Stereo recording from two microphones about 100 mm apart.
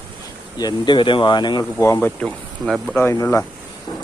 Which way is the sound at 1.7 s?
30° left (ahead or behind).